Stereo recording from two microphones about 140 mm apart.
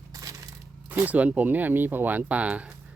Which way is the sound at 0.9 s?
10° right (ahead or behind).